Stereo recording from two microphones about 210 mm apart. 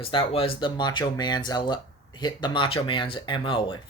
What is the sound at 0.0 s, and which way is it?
Speech, 25° left (ahead or behind).